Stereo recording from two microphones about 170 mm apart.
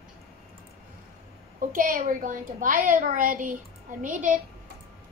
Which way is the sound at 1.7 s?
55° right (ahead or behind).